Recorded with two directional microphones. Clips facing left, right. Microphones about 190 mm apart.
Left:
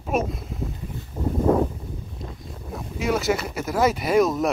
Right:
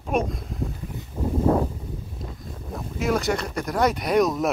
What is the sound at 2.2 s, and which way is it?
Boat, centre (ahead or behind).